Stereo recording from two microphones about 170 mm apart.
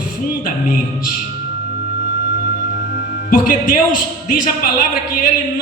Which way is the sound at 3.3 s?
55° left (ahead or behind).